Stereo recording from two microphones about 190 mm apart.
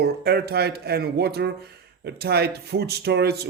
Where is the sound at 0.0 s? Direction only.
60° right (ahead or behind).